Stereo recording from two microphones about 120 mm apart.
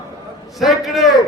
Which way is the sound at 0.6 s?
Centre (ahead or behind).